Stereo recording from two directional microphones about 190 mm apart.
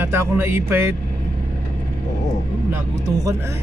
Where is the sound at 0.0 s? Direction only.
10° right (ahead or behind).